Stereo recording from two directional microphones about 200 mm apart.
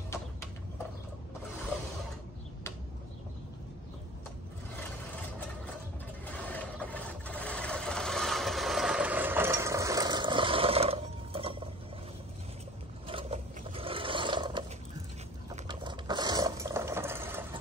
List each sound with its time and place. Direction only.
6.3 s vehicle: 5° left (ahead or behind); by 11.5 s 30° right (ahead or behind)
13.0 s roar: 25° right (ahead or behind)
15.6 s a sound: 25° right (ahead or behind)